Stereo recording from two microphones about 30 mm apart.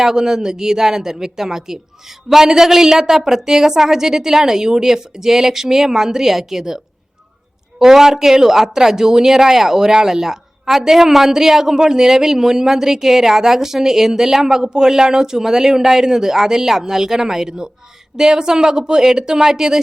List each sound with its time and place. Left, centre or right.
0.0 s speech: centre